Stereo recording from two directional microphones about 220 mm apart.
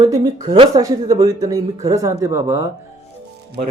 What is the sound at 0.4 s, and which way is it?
Speech, 25° right (ahead or behind).